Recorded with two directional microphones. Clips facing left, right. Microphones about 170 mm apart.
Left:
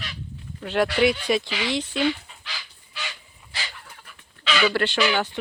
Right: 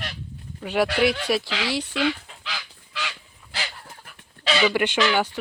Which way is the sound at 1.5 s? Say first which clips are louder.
Even; 90° right.